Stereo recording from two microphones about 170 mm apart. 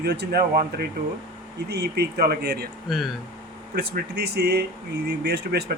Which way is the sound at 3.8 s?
75° right (ahead or behind).